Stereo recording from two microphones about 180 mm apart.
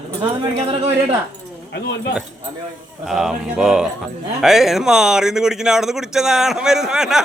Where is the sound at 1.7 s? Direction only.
70° left (ahead or behind).